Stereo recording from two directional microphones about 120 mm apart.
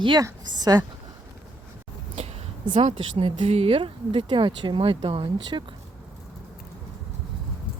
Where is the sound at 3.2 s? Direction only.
50° right (ahead or behind).